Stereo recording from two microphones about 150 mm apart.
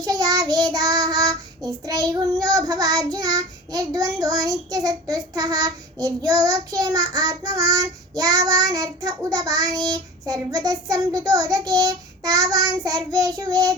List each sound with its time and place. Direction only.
0.0 s child singing: 25° right (ahead or behind)